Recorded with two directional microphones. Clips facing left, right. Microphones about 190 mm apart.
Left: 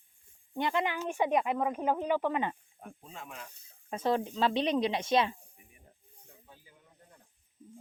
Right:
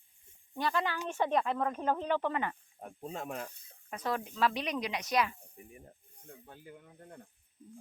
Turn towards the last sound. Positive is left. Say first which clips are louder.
# right 9 dB
turn(degrees=-60)  # may be behind; listen again after turning